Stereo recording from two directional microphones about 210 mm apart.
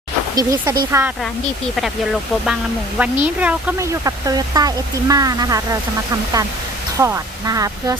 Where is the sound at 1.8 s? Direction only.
Centre (ahead or behind); by 5.8 s 15° right (ahead or behind).